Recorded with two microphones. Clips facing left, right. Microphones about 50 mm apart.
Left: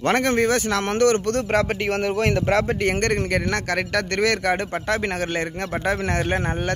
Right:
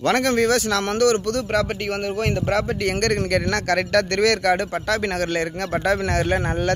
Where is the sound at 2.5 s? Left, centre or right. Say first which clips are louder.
Left 1 dB; left.